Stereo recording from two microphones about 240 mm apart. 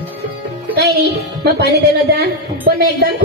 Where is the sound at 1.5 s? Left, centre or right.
Right.